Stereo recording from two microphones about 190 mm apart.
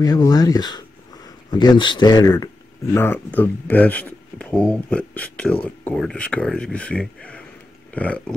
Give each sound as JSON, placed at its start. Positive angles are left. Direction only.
{"t": 0.0, "sound": "speech", "side_deg": 20}